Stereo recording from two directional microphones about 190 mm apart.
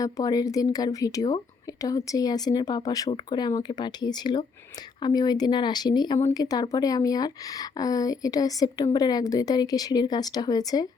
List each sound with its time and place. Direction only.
0.0 s speech: 20° left (ahead or behind)